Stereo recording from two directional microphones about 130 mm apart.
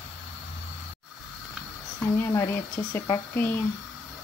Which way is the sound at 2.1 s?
20° left (ahead or behind).